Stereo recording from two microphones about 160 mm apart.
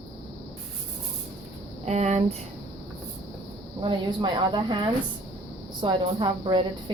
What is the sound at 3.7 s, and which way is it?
Speech, 30° right (ahead or behind).